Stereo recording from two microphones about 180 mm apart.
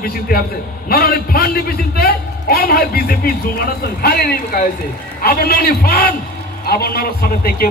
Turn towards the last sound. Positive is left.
turn(degrees=55)  # may be behind; listen again after turning